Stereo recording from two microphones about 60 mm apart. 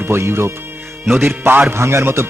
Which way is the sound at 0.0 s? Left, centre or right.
Right.